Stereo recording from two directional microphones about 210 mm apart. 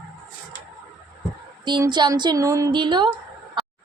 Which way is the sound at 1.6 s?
20° right (ahead or behind).